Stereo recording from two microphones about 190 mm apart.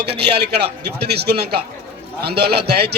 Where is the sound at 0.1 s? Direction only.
60° right (ahead or behind).